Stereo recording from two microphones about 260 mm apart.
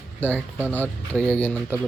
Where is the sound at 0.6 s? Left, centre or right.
Centre.